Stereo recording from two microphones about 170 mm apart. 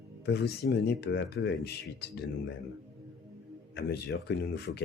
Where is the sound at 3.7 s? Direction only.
75° left (ahead or behind).